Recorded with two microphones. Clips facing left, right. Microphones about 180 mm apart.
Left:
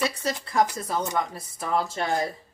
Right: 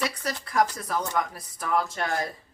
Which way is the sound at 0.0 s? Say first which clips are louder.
Left 3 dB; 25° left (ahead or behind).